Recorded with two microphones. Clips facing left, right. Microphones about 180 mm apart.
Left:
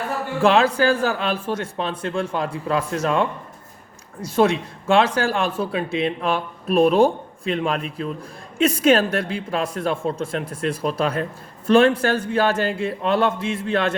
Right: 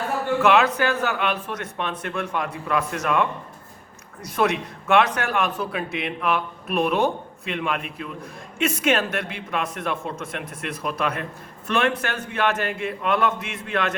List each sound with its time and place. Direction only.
0.4 s speech: 30° left (ahead or behind)